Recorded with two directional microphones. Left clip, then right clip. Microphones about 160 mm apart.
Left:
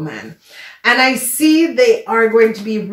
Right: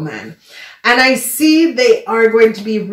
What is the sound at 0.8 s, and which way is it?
Speech, 25° right (ahead or behind).